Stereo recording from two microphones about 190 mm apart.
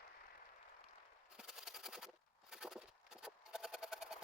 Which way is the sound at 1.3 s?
Centre (ahead or behind).